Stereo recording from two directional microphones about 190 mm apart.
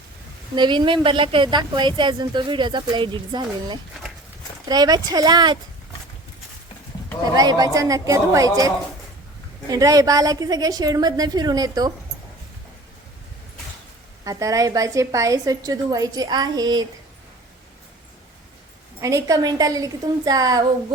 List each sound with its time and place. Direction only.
0.5 s a woman's voice: 25° right (ahead or behind)
7.3 s a woman's voice: 20° right (ahead or behind)
14.3 s a woman's voice: 15° right (ahead or behind)
18.9 s a woman's voice: 15° right (ahead or behind)